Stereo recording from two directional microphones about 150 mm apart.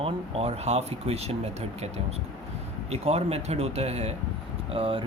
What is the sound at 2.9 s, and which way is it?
Speech, 45° right (ahead or behind).